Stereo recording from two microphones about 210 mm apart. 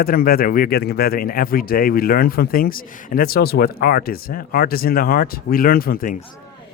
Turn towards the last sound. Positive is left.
turn(degrees=45)  # may be behind; listen again after turning